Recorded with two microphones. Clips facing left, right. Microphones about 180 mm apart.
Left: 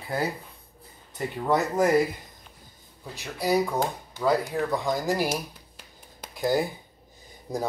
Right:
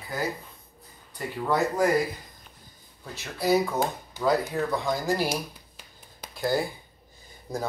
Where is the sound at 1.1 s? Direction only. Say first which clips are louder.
Left 2 dB; 20° left (ahead or behind).